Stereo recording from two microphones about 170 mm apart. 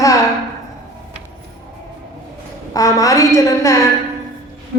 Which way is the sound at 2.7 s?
20° left (ahead or behind).